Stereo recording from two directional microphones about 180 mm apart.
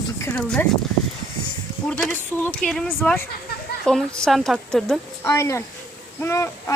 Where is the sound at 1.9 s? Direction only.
5° left (ahead or behind).